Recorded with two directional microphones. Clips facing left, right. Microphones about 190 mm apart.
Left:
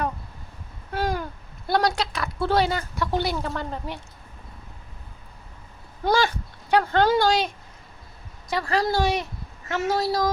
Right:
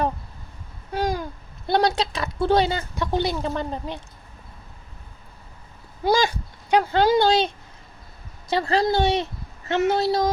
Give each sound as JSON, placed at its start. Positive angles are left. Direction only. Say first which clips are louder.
{"t": 0.9, "sound": "speech", "louder": "right 2 dB", "side_deg": -15}
{"t": 6.0, "sound": "a woman's voice", "louder": "right 1 dB", "side_deg": -10}